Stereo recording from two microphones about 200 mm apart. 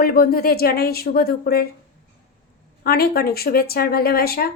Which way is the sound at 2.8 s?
50° left (ahead or behind).